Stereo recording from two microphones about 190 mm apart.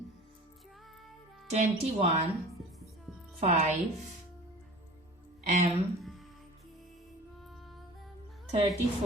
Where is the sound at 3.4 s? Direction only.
35° right (ahead or behind).